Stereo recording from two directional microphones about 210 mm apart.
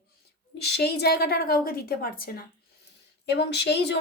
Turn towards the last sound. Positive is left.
turn(degrees=55)  # may be behind; listen again after turning